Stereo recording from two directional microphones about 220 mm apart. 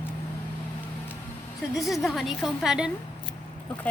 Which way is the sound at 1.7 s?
Centre (ahead or behind).